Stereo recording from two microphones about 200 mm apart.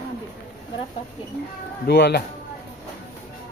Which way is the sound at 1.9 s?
55° left (ahead or behind).